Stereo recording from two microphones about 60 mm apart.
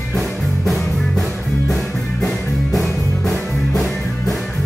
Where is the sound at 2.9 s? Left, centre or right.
Left.